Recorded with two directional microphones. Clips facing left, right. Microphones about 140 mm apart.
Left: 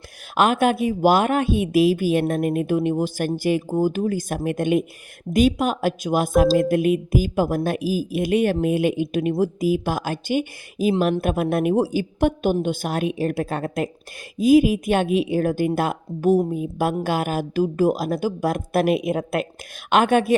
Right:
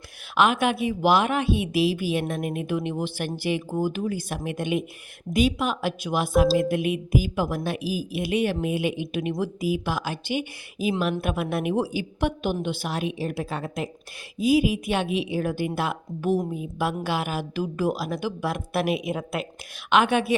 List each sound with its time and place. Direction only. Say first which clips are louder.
0.3 s a woman's voice: left 3 dB; 45° left (ahead or behind)